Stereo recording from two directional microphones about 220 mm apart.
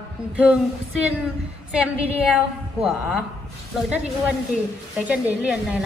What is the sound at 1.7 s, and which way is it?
Speech, 5° right (ahead or behind).